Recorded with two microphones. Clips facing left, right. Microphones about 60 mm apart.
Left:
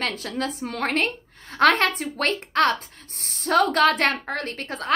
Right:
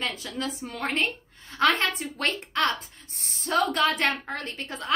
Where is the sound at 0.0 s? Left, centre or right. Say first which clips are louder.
Left 4 dB; left.